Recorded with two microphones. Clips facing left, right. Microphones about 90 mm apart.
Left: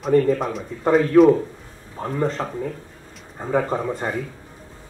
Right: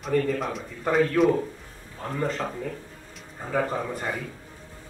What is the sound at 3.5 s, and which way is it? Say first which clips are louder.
Speech: left 5 dB; 30° left (ahead or behind).